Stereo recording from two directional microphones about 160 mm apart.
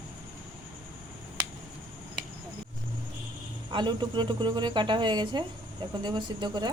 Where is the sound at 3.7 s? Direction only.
30° right (ahead or behind).